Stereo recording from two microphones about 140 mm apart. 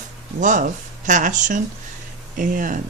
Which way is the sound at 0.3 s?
65° right (ahead or behind).